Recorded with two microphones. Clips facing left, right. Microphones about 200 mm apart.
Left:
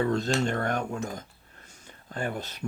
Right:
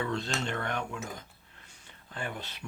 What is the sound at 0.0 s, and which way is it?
Speech, 40° left (ahead or behind).